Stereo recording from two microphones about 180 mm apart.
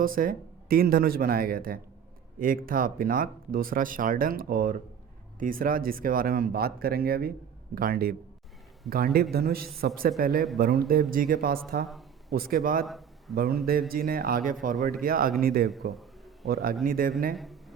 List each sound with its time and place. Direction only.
0.0 s speech: 50° right (ahead or behind)
12.8 s a sound: centre (ahead or behind)
13.3 s speech: 55° right (ahead or behind)
15.9 s a sound: centre (ahead or behind)
16.5 s speech: 55° right (ahead or behind)
17.3 s a man's voice: centre (ahead or behind)